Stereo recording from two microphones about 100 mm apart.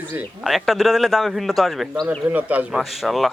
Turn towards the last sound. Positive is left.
turn(degrees=0)  # may be behind; listen again after turning